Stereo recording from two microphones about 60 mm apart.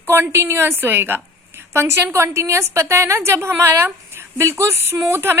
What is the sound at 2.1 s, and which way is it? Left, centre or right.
A woman's voice, right.